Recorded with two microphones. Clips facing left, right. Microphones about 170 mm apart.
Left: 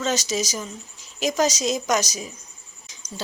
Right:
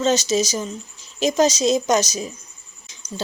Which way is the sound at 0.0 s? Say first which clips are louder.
Right 6 dB; 25° right (ahead or behind).